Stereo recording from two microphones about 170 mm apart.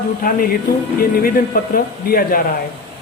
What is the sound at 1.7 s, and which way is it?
Speech, 60° left (ahead or behind).